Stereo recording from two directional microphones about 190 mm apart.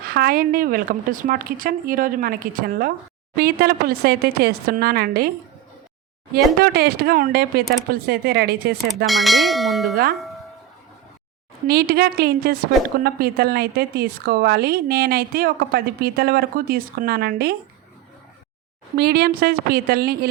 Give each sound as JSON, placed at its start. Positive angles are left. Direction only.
{"t": 0.1, "sound": "a woman's voice", "side_deg": -50}
{"t": 6.3, "sound": "a woman's voice", "side_deg": -55}
{"t": 9.0, "sound": "bell", "side_deg": 0}
{"t": 9.9, "sound": "a woman's voice", "side_deg": -50}
{"t": 11.7, "sound": "a woman's voice", "side_deg": -55}
{"t": 18.9, "sound": "a woman's voice", "side_deg": -55}